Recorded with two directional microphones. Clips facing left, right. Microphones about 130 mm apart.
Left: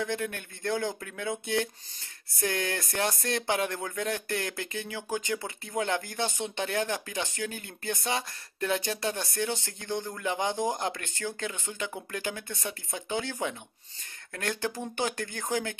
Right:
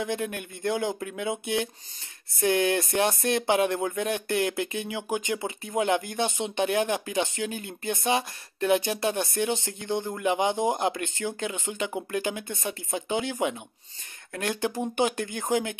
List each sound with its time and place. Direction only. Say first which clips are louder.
0.0 s speech: right 2 dB; 15° right (ahead or behind)